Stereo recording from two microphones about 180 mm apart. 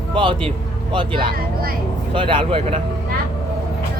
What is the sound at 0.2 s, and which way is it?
Speech, 30° right (ahead or behind).